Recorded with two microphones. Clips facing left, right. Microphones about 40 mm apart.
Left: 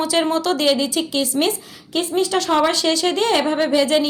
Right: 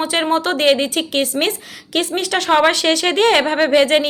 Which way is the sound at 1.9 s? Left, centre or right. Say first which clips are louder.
Even; right.